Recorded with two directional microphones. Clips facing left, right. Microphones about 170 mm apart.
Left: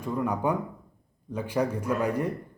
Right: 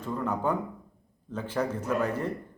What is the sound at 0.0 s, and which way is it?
A man's voice, 10° left (ahead or behind).